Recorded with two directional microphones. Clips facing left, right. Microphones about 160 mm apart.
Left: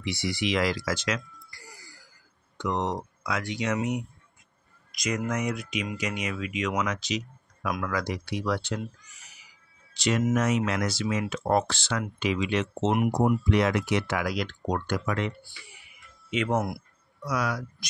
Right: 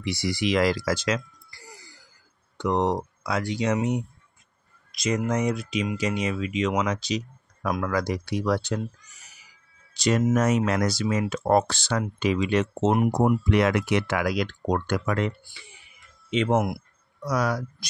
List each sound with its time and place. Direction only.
0.0 s speech: 40° right (ahead or behind)
9.9 s speech: 40° right (ahead or behind)
13.2 s speech: 60° right (ahead or behind)
15.4 s speech: 25° right (ahead or behind)
17.3 s speech: 40° right (ahead or behind)